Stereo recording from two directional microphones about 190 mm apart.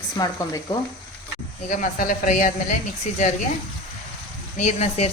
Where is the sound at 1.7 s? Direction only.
45° left (ahead or behind).